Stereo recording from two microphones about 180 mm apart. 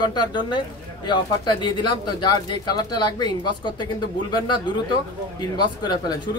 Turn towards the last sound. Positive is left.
turn(degrees=25)  # may be behind; listen again after turning